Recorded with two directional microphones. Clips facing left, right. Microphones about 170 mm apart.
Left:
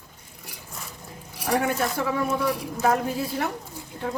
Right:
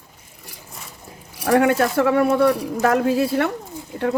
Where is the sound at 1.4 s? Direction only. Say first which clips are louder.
Right 8 dB; 75° right (ahead or behind).